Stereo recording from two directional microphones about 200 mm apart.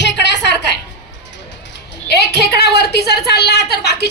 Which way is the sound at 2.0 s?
55° left (ahead or behind).